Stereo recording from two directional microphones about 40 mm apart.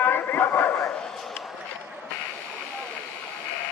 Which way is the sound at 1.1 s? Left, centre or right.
Centre.